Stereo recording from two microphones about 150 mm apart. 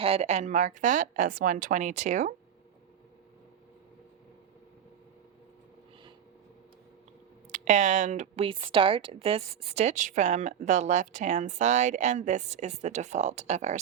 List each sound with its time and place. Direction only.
0.0 s a woman's voice: 45° right (ahead or behind)
7.5 s speech: 55° right (ahead or behind)
8.4 s a woman's voice: 35° right (ahead or behind); by 13.7 s 50° right (ahead or behind)